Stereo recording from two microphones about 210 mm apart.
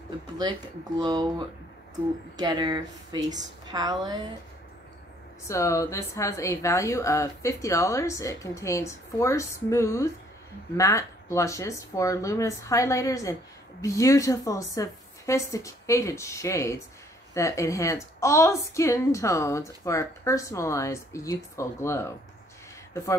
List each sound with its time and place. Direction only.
0.4 s speech: 20° right (ahead or behind)
2.3 s speech: 20° right (ahead or behind)
5.5 s speech: 15° left (ahead or behind)